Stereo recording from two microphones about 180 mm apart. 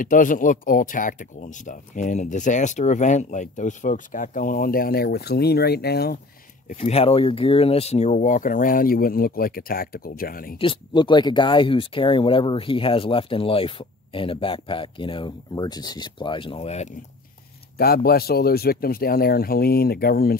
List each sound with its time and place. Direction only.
0.0 s speech: 50° left (ahead or behind)
6.8 s speech: 35° left (ahead or behind); by 10.5 s 55° left (ahead or behind)
10.6 s speech: 25° left (ahead or behind)
17.7 s speech: 60° left (ahead or behind)